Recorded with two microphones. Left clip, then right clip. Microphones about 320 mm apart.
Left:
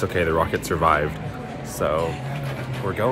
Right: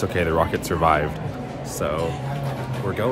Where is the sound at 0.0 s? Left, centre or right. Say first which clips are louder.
Even; centre.